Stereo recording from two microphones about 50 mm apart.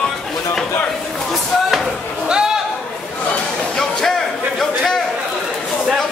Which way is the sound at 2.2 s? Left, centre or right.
Centre.